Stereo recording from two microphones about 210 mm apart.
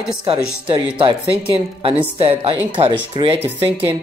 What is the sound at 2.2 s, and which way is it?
Speech, 25° right (ahead or behind).